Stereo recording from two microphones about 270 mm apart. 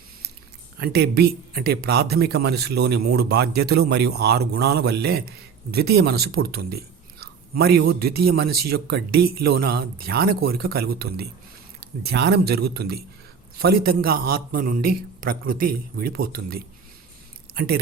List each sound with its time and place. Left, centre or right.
0.8 s speech: right